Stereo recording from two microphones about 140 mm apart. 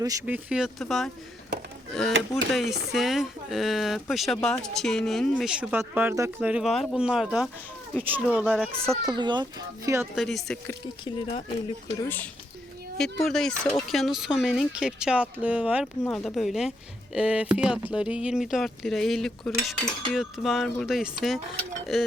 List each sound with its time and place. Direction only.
0.3 s speech: 10° right (ahead or behind)
6.5 s speech: centre (ahead or behind)
8.4 s speech: 5° left (ahead or behind)
9.0 s speech: 30° right (ahead or behind)
10.2 s speech: centre (ahead or behind)
11.0 s speech: 35° left (ahead or behind)
12.0 s speech: 15° left (ahead or behind)
13.0 s speech: 5° left (ahead or behind)
16.0 s speech: 5° left (ahead or behind)